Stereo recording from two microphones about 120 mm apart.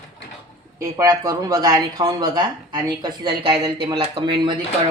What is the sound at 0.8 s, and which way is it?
Speech, 30° right (ahead or behind).